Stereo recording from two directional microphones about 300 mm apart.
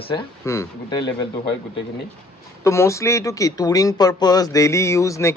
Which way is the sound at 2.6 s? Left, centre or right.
Centre.